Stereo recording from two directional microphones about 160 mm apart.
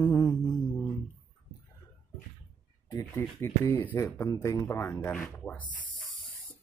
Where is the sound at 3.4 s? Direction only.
15° left (ahead or behind).